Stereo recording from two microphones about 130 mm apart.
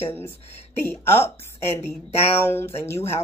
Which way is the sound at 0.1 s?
20° left (ahead or behind).